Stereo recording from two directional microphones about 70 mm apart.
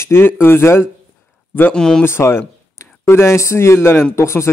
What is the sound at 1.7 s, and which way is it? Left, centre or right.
Speech, centre.